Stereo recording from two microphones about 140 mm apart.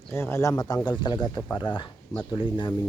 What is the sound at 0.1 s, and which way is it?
Speech, 20° left (ahead or behind).